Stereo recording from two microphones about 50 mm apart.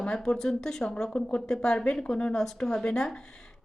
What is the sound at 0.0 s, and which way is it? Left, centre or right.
A woman's voice, centre.